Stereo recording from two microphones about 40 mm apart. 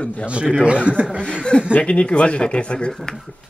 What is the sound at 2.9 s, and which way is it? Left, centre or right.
Speech, centre.